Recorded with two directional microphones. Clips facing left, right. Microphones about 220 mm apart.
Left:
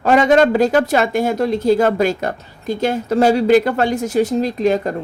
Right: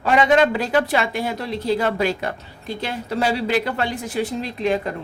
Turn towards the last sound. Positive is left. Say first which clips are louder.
# left 5 dB
turn(degrees=45)  # may be behind; listen again after turning